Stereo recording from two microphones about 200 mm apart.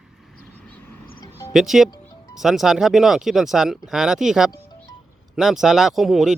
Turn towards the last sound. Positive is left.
turn(degrees=0)  # may be behind; listen again after turning